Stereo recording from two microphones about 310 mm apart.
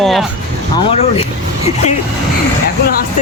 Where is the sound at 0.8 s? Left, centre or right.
Centre.